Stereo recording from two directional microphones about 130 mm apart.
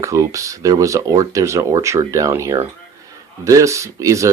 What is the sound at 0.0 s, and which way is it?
Speech, 25° right (ahead or behind).